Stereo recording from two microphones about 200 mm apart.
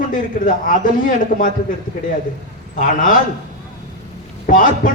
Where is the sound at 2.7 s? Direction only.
40° left (ahead or behind).